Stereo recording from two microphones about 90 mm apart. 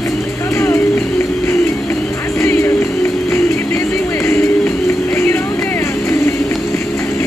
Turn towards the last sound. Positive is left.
turn(degrees=30)  # may be behind; listen again after turning